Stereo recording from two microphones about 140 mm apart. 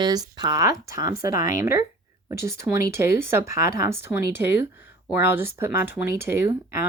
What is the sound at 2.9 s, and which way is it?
Speech, 20° right (ahead or behind).